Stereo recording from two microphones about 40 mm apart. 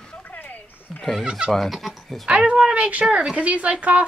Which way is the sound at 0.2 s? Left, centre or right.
Left.